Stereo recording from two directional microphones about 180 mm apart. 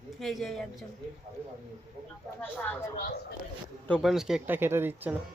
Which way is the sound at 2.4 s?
10° left (ahead or behind).